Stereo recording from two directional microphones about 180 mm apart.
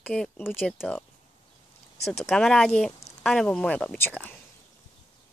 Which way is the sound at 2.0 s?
Centre (ahead or behind).